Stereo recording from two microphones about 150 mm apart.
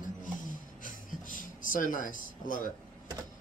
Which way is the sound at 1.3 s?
65° left (ahead or behind).